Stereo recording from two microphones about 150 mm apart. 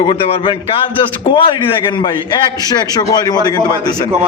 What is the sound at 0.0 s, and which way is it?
A man's voice, 35° left (ahead or behind).